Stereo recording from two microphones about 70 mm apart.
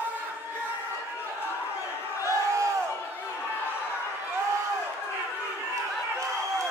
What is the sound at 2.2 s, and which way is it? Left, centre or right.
Crowd, right.